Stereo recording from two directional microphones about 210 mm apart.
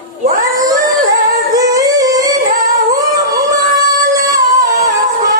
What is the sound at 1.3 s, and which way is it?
Singing, 15° right (ahead or behind).